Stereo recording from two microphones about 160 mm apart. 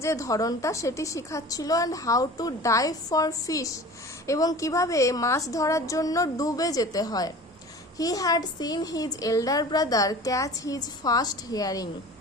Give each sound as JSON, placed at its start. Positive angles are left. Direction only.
{"t": 0.0, "sound": "a woman's voice", "side_deg": 20}